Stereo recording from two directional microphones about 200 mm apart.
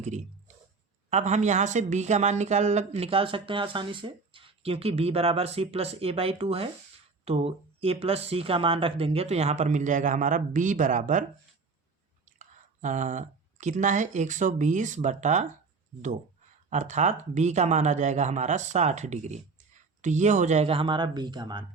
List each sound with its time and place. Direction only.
0.0 s a sound: 35° right (ahead or behind)
1.1 s speech: 35° right (ahead or behind)
16.6 s speech: 35° right (ahead or behind)